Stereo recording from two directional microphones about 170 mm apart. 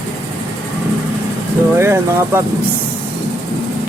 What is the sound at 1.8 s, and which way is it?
Speech, 15° right (ahead or behind).